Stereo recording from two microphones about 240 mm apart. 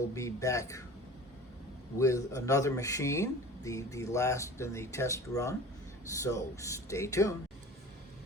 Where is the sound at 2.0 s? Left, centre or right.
Centre.